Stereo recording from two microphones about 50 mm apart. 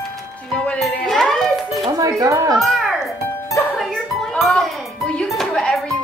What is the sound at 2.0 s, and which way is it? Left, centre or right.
Speech, right.